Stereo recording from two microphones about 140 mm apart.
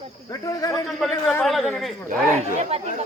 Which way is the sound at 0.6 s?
25° left (ahead or behind).